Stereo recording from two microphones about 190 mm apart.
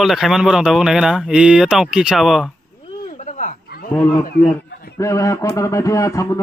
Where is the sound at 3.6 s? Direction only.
55° left (ahead or behind).